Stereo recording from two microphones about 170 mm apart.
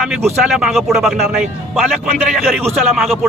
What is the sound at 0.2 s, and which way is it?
A man's voice, 10° right (ahead or behind).